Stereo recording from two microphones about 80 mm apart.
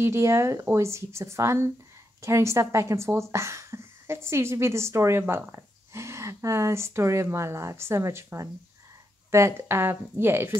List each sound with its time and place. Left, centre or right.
0.0 s speech: right